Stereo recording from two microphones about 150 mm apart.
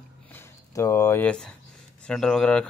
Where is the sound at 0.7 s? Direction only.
20° left (ahead or behind).